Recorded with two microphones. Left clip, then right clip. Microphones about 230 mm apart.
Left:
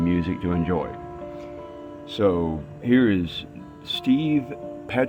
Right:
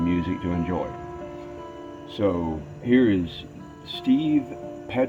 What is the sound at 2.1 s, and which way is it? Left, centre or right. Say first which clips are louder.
Speech: left 3 dB; left.